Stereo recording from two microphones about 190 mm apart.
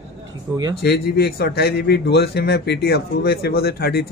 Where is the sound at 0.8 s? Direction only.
60° left (ahead or behind).